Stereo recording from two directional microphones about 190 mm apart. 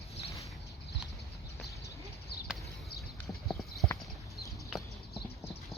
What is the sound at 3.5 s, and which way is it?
Clip-clop, centre (ahead or behind).